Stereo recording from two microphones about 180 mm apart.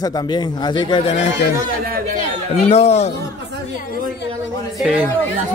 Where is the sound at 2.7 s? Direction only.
35° left (ahead or behind).